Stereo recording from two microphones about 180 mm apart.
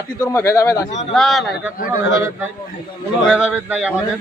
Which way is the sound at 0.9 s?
40° left (ahead or behind).